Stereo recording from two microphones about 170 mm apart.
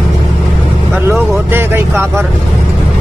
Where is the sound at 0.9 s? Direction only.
15° right (ahead or behind).